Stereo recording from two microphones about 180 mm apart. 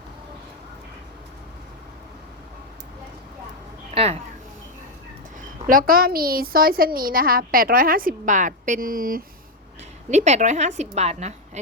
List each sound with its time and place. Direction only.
3.9 s speech: 35° right (ahead or behind)
5.4 s a woman's voice: 50° right (ahead or behind)
10.1 s a woman's voice: 40° right (ahead or behind)